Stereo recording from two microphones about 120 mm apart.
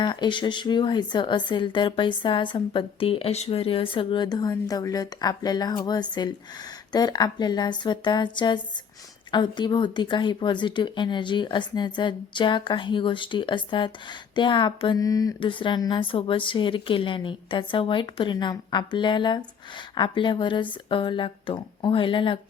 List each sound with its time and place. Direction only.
0.0 s speech: 40° left (ahead or behind)
15.4 s a woman's voice: 45° left (ahead or behind)